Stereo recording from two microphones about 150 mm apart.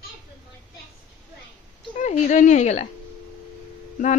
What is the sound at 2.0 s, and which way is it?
Speech, 60° left (ahead or behind).